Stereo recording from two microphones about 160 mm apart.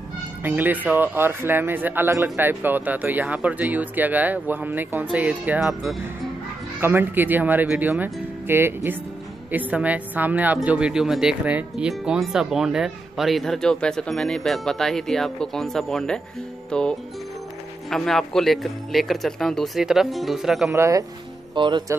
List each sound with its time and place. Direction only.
0.4 s a woman's voice: 10° right (ahead or behind)
20.7 s speech: 20° right (ahead or behind)
21.5 s speech: 30° right (ahead or behind)